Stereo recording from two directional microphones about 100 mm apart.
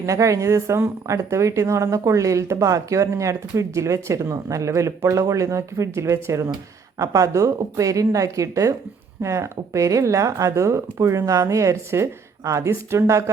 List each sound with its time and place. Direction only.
0.0 s speech: 30° right (ahead or behind)